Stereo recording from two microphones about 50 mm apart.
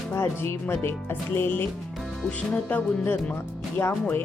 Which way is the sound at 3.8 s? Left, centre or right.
Left.